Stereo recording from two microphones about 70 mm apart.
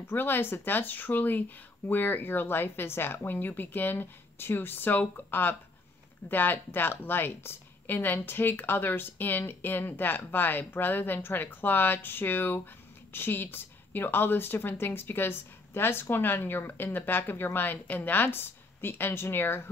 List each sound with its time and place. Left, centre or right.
0.0 s a woman's voice: left